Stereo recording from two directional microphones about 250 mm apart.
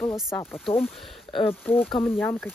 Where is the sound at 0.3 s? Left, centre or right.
Centre.